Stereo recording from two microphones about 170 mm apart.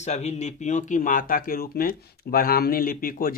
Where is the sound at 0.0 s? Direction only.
40° left (ahead or behind).